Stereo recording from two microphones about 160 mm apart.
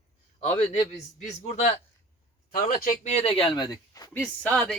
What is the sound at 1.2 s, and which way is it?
Speech, 45° left (ahead or behind).